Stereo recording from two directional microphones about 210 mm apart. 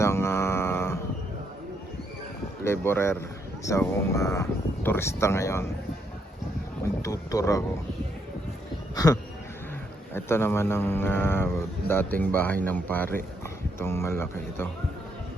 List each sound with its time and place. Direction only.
0.0 s a sound: 10° left (ahead or behind)
2.6 s speech: 10° left (ahead or behind)
7.0 s speech: 15° left (ahead or behind)
10.2 s speech: 10° left (ahead or behind)